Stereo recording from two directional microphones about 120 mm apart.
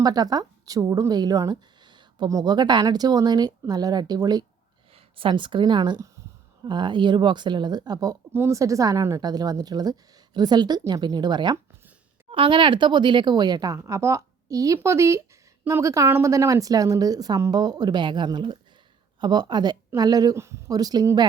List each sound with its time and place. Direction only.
0.0 s speech: 35° right (ahead or behind)
5.1 s speech: 45° right (ahead or behind)
8.3 s a woman's voice: 20° right (ahead or behind)